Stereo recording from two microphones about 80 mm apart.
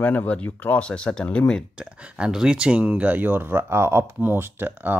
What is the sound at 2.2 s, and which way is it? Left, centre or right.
Speech, centre.